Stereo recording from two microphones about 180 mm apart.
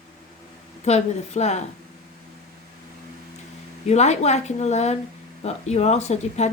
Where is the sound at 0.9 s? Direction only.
40° left (ahead or behind).